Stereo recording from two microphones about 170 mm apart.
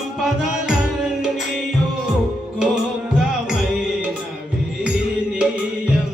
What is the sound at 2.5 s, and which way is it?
Music, 5° right (ahead or behind).